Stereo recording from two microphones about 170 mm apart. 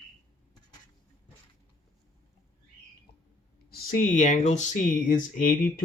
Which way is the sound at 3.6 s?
50° left (ahead or behind).